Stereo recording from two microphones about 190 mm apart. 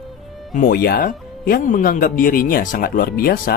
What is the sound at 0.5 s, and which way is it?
Speech, 50° left (ahead or behind).